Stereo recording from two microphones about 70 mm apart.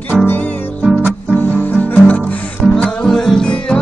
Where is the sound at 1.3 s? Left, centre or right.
Left.